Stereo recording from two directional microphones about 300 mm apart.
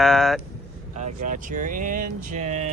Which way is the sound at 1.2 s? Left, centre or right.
Right.